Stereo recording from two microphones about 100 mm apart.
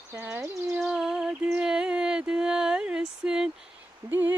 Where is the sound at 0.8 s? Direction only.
5° right (ahead or behind).